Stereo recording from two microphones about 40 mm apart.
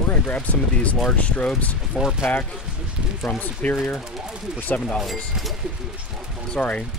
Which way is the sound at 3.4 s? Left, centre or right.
Left.